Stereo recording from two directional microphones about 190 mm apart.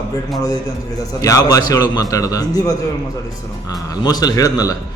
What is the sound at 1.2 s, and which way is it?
A man's voice, 15° left (ahead or behind).